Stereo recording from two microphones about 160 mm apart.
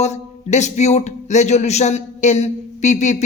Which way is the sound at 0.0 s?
45° left (ahead or behind).